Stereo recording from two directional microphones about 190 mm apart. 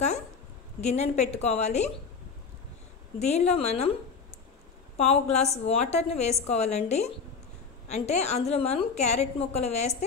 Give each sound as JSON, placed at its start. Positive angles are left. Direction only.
{"t": 0.7, "sound": "a woman's voice", "side_deg": 35}
{"t": 3.2, "sound": "a woman's voice", "side_deg": 35}
{"t": 4.9, "sound": "a woman's voice", "side_deg": 35}